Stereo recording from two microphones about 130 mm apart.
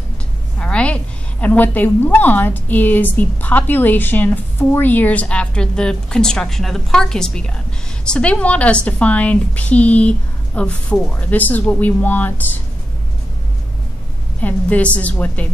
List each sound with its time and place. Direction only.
0.6 s a woman's voice: 10° left (ahead or behind)
14.4 s a woman's voice: 10° left (ahead or behind)